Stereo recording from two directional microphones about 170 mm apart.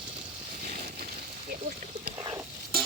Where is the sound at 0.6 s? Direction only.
50° right (ahead or behind).